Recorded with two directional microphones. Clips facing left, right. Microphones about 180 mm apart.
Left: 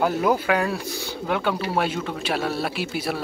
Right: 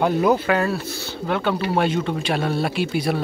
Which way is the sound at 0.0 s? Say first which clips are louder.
Right 3 dB; 5° left (ahead or behind).